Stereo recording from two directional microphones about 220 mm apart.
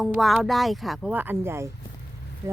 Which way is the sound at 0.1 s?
Centre (ahead or behind).